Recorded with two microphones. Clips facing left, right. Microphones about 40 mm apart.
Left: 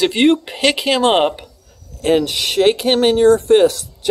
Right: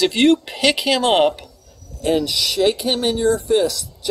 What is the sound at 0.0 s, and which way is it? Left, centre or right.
Speech, left.